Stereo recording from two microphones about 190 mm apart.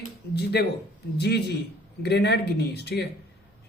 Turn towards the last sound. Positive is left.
turn(degrees=60)  # may be behind; listen again after turning